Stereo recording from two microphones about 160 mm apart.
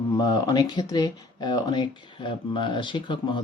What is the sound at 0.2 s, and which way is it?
Speech, 25° left (ahead or behind).